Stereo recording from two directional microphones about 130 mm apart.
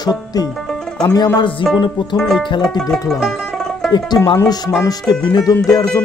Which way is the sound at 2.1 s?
5° left (ahead or behind).